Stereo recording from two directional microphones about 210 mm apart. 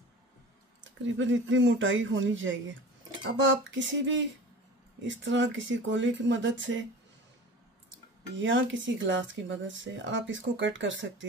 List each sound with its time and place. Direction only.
1.1 s speech: 65° right (ahead or behind)
8.4 s speech: 60° right (ahead or behind)